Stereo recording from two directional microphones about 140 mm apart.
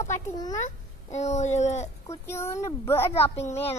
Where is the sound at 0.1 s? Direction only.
25° left (ahead or behind).